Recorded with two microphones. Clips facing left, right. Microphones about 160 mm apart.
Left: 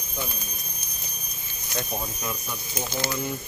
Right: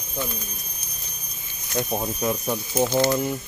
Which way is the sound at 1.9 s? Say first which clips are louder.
Right 7 dB; 30° right (ahead or behind).